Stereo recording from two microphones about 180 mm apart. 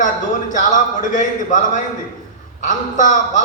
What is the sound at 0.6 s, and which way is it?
A man's voice, 45° left (ahead or behind).